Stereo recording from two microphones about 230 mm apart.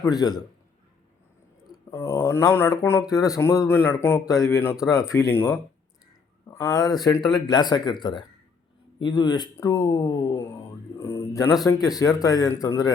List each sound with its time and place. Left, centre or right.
0.0 s speech: centre
1.9 s speech: centre